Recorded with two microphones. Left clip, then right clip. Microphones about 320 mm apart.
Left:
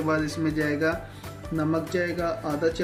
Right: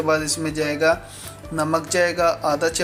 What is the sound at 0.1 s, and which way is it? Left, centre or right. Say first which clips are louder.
Speech: right 4 dB; centre.